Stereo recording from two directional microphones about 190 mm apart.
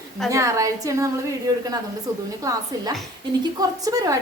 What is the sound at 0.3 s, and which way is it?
A woman's voice, 15° right (ahead or behind).